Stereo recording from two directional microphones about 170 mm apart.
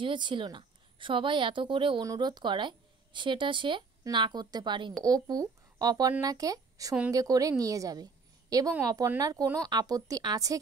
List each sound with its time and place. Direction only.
0.0 s a woman's voice: 30° right (ahead or behind)